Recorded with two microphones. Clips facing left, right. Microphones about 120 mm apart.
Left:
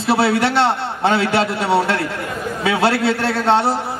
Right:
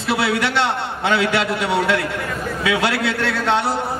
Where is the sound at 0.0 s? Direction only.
35° left (ahead or behind).